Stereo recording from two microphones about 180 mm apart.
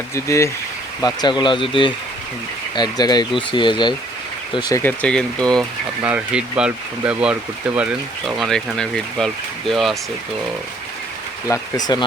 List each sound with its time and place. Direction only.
0.1 s speech: 15° left (ahead or behind)
4.8 s speech: 10° left (ahead or behind)
6.0 s speech: 5° right (ahead or behind)
11.9 s speech: 25° left (ahead or behind)